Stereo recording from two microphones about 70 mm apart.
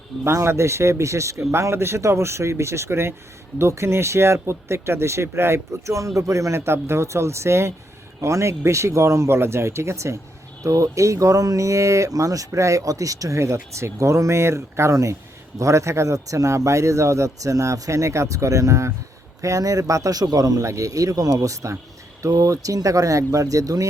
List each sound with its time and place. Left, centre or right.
0.3 s a man's voice: right